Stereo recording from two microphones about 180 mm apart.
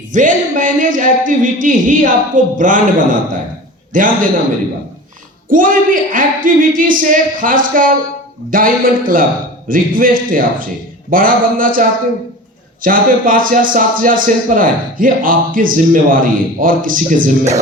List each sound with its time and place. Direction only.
0.1 s a man's voice: 45° right (ahead or behind)
5.5 s a man's voice: 50° right (ahead or behind)